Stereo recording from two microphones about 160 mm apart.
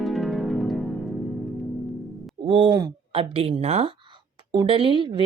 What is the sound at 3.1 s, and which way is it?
Speech, 35° right (ahead or behind).